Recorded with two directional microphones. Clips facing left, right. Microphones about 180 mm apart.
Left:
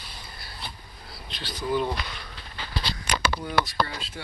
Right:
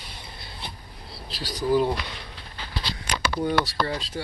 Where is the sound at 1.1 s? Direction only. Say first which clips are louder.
Right 4 dB; 35° right (ahead or behind).